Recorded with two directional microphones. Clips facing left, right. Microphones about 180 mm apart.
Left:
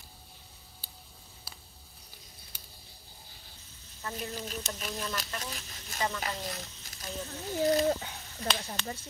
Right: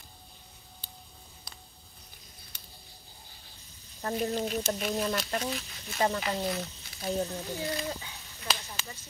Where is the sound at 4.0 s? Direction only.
35° right (ahead or behind).